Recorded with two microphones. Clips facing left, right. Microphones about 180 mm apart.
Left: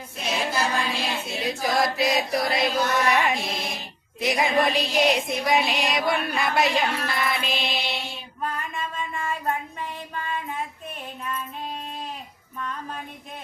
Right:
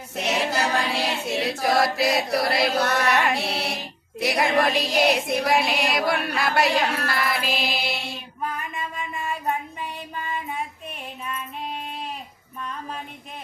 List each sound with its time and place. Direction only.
0.2 s choir: 70° right (ahead or behind)
1.8 s music: 5° right (ahead or behind)
2.3 s chant: 70° right (ahead or behind)
3.1 s music: centre (ahead or behind)
3.3 s music: 70° right (ahead or behind)
4.4 s chant: 70° right (ahead or behind)
4.9 s music: centre (ahead or behind)
8.5 s a sound: 15° right (ahead or behind)
10.2 s child singing: 15° right (ahead or behind)